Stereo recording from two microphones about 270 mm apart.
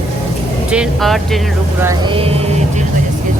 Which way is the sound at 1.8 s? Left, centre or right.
Centre.